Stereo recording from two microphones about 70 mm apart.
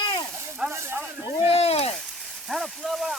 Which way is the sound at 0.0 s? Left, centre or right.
Left.